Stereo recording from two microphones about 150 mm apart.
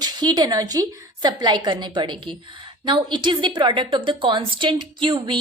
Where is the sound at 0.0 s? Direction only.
25° right (ahead or behind).